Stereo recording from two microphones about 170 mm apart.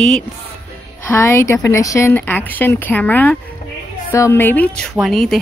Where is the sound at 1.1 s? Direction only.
15° left (ahead or behind).